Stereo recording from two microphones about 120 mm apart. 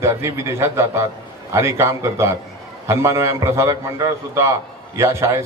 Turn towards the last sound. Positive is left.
turn(degrees=-25)  # may be behind; listen again after turning